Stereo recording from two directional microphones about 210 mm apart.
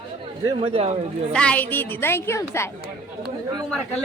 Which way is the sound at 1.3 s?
5° left (ahead or behind).